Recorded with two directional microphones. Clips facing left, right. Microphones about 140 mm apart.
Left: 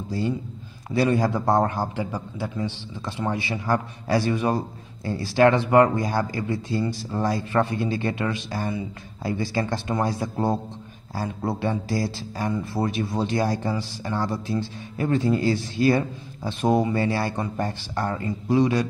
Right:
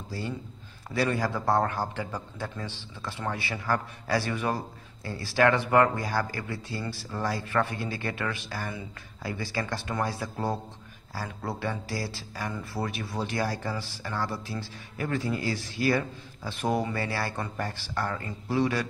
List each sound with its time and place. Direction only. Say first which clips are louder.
0.9 s a man's voice: left 6 dB; 20° left (ahead or behind)